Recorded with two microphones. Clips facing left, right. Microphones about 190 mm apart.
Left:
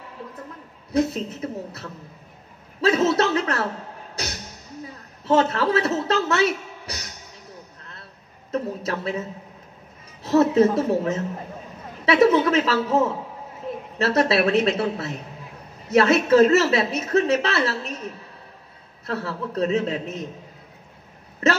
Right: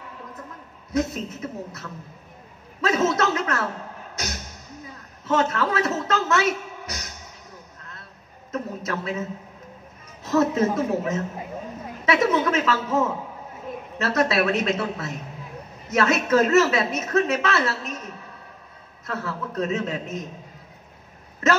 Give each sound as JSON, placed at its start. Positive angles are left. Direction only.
{"t": 0.9, "sound": "speech", "side_deg": 35}
{"t": 5.2, "sound": "speech", "side_deg": 30}
{"t": 8.5, "sound": "speech", "side_deg": 30}
{"t": 10.2, "sound": "speech", "side_deg": 30}
{"t": 19.0, "sound": "speech", "side_deg": 30}